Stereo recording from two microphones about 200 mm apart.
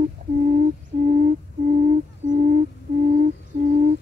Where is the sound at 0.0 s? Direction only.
35° right (ahead or behind).